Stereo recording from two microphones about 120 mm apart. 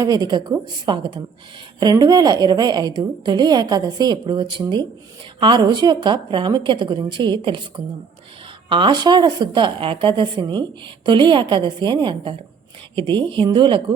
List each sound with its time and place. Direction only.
0.0 s a woman's voice: 35° right (ahead or behind)
8.7 s a woman's voice: 40° right (ahead or behind)